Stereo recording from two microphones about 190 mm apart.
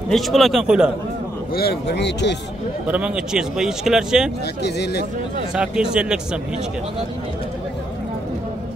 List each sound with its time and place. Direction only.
0.1 s speech: centre (ahead or behind)
1.5 s speech: 55° left (ahead or behind)
2.9 s speech: 5° right (ahead or behind)
4.6 s speech: 60° left (ahead or behind)
5.5 s speech: 5° right (ahead or behind)